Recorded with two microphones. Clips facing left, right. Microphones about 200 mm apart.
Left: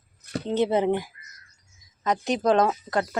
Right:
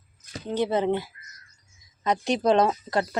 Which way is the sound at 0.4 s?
20° left (ahead or behind).